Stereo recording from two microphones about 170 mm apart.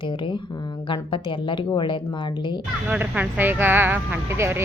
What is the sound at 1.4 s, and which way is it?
Speech, 30° left (ahead or behind).